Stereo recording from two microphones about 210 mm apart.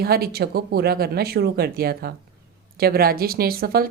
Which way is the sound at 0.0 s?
45° right (ahead or behind).